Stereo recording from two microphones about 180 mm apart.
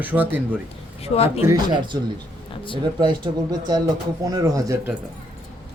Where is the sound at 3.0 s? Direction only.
25° right (ahead or behind).